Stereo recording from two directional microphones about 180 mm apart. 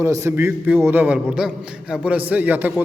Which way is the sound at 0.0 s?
15° right (ahead or behind).